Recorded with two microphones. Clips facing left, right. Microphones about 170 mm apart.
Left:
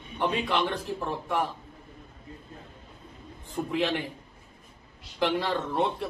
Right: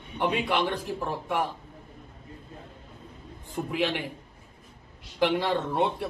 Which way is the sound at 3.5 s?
5° right (ahead or behind).